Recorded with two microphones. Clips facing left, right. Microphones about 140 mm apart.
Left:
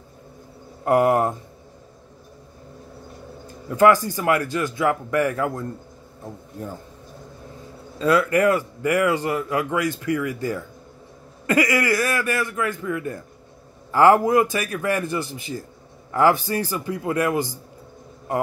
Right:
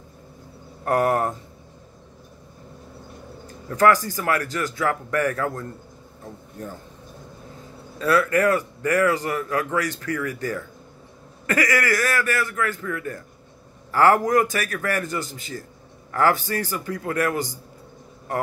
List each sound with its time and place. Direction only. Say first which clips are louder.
0.8 s a man's voice: left 3 dB; 20° left (ahead or behind)
3.6 s a man's voice: left 2 dB; 15° left (ahead or behind)
4.1 s a man's voice: left 3 dB; 25° left (ahead or behind)
8.1 s a man's voice: left 1 dB; 15° left (ahead or behind)